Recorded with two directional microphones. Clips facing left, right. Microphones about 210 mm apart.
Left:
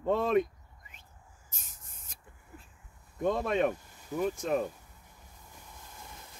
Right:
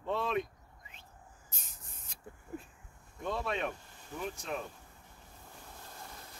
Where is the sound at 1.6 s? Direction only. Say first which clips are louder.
Even; 45° left (ahead or behind).